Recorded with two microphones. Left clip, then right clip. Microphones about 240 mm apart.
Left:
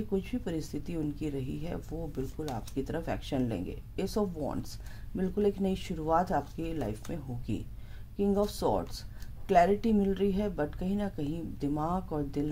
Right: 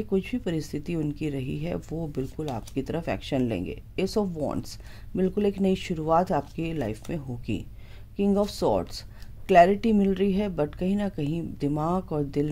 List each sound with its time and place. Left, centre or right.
0.1 s speech: right